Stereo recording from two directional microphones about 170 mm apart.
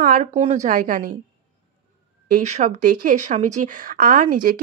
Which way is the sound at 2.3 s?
45° right (ahead or behind).